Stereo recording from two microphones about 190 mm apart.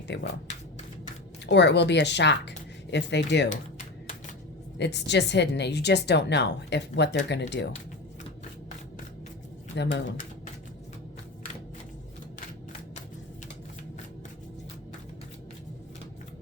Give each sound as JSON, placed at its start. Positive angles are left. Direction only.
{"t": 0.1, "sound": "speech", "side_deg": 65}
{"t": 1.5, "sound": "a woman's voice", "side_deg": 65}
{"t": 4.8, "sound": "a woman's voice", "side_deg": 65}
{"t": 9.7, "sound": "speech", "side_deg": 70}